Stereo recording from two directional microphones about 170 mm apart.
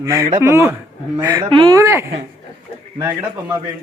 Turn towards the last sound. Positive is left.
turn(degrees=-20)  # may be behind; listen again after turning